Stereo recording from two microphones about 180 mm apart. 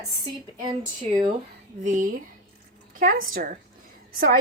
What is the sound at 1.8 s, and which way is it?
A woman's voice, 45° right (ahead or behind).